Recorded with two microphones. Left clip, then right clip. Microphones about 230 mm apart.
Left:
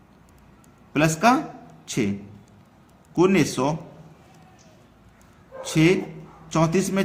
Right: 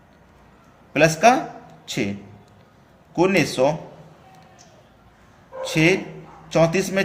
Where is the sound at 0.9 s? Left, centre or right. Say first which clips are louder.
Right 4 dB; left.